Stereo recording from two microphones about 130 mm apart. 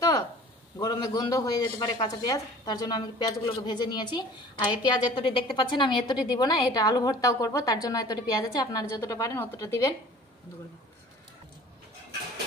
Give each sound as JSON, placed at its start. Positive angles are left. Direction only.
{"t": 0.7, "sound": "a woman's voice", "side_deg": 30}